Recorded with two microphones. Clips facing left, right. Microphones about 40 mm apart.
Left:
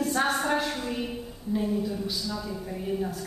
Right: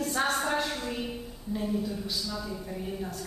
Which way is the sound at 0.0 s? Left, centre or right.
Centre.